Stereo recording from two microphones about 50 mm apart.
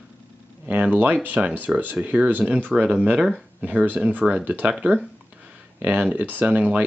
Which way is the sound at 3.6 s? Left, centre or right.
Right.